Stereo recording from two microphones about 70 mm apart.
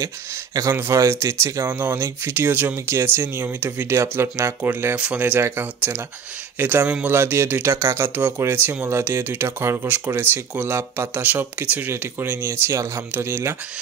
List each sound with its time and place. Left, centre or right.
0.7 s speech: right
1.7 s speech: right
4.9 s speech: centre
7.1 s speech: right